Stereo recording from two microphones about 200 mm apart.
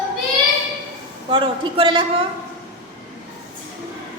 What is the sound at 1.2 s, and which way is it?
Speech, 25° right (ahead or behind).